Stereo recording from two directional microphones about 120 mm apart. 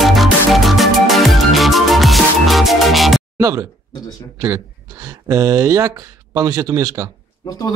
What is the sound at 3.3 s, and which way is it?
Speech, 30° right (ahead or behind).